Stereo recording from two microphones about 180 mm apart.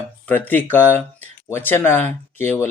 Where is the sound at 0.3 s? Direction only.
10° left (ahead or behind).